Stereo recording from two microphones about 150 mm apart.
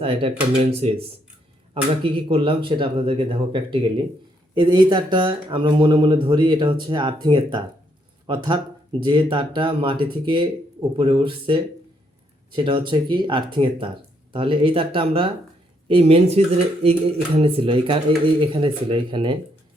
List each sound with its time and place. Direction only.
0.0 s speech: 35° right (ahead or behind)